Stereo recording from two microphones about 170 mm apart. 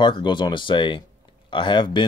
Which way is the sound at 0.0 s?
30° left (ahead or behind).